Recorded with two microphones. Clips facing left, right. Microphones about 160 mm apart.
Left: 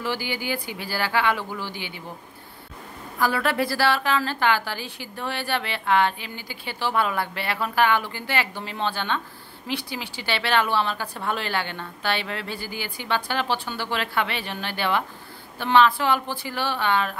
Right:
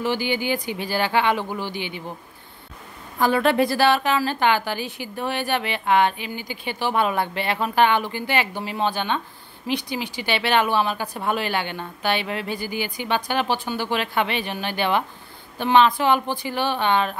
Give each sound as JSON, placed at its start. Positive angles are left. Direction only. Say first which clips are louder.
{"t": 0.0, "sound": "speech", "louder": "right 5 dB", "side_deg": -20}
{"t": 3.2, "sound": "a woman's voice", "louder": "right 5 dB", "side_deg": -25}